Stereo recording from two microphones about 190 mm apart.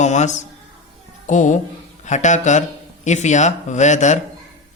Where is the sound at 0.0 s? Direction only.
40° left (ahead or behind).